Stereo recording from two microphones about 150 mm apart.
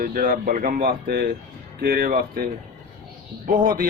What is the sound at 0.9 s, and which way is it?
Speech, 90° right.